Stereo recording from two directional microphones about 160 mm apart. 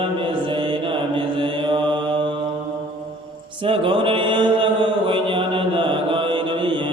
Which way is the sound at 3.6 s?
35° right (ahead or behind).